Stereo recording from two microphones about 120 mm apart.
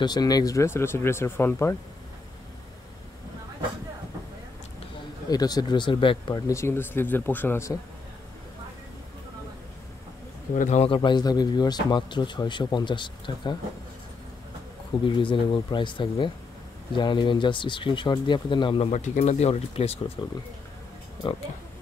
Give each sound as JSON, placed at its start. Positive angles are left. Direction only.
{"t": 0.0, "sound": "speech", "side_deg": 35}
{"t": 5.3, "sound": "speech", "side_deg": 35}
{"t": 6.4, "sound": "speech", "side_deg": 25}
{"t": 10.5, "sound": "speech", "side_deg": 70}
{"t": 10.9, "sound": "speech", "side_deg": 40}
{"t": 15.0, "sound": "speech", "side_deg": 45}
{"t": 18.8, "sound": "speech", "side_deg": 75}
{"t": 20.2, "sound": "speech", "side_deg": 45}